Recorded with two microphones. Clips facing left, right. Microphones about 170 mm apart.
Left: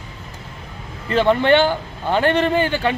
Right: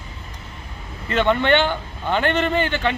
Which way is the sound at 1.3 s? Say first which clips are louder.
Left 3 dB; 35° left (ahead or behind).